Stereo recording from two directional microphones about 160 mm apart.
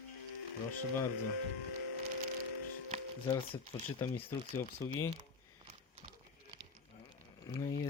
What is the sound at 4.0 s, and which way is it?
Speech, 15° left (ahead or behind).